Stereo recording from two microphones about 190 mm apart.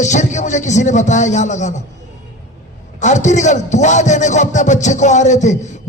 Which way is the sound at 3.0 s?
40° left (ahead or behind).